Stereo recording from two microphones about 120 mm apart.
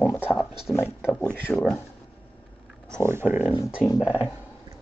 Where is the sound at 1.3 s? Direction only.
15° left (ahead or behind).